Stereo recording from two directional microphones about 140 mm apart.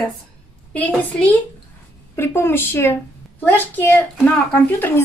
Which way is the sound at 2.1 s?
15° left (ahead or behind).